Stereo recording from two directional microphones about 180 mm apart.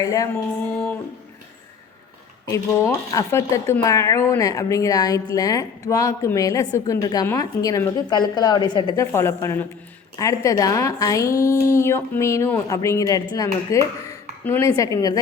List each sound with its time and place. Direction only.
0.0 s speech: 20° left (ahead or behind)
0.7 s a woman's voice: 10° left (ahead or behind)
2.5 s a woman's voice: 20° left (ahead or behind)